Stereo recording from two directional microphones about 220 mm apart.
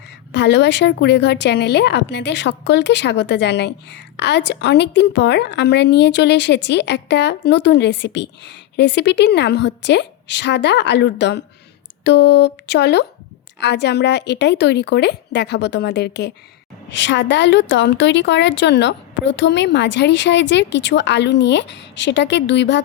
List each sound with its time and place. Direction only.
0.3 s a woman's voice: 50° left (ahead or behind)